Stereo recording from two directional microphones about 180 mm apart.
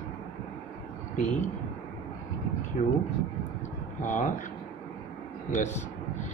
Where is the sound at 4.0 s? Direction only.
45° left (ahead or behind).